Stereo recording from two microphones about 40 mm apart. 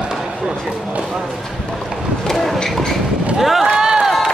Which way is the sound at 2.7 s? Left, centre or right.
Centre.